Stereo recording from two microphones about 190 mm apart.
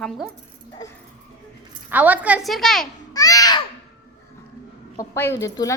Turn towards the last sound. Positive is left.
turn(degrees=15)  # may be behind; listen again after turning